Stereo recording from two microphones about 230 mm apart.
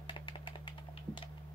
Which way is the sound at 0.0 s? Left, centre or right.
Left.